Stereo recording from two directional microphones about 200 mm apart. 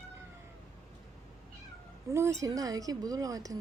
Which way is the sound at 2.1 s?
15° right (ahead or behind).